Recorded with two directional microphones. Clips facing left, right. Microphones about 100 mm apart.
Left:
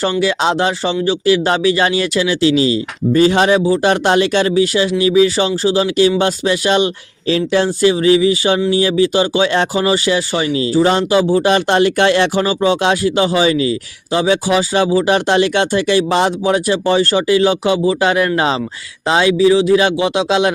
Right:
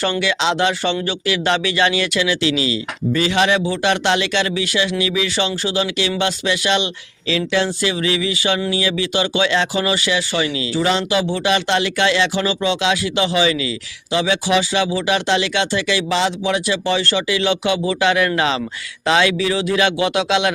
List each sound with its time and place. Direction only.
0.2 s speech: 35° left (ahead or behind)